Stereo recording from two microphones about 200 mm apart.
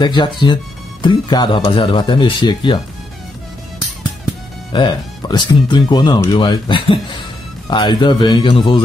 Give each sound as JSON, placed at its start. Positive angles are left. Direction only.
{"t": 0.0, "sound": "speech", "side_deg": 20}
{"t": 4.7, "sound": "speech", "side_deg": 20}